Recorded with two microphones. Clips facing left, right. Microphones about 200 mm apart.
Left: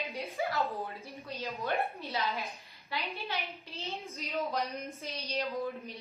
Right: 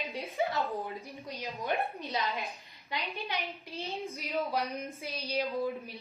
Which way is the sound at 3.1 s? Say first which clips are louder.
Right 1 dB; 15° right (ahead or behind).